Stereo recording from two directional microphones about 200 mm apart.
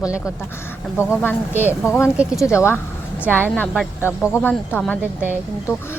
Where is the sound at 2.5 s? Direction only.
15° left (ahead or behind).